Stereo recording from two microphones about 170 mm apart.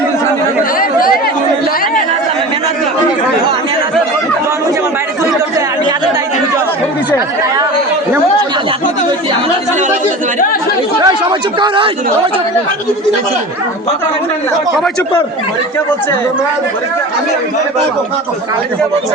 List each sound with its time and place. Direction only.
0.8 s chatter: 55° left (ahead or behind)
11.0 s speech: 30° right (ahead or behind)